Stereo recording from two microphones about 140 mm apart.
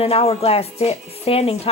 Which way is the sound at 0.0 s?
45° left (ahead or behind).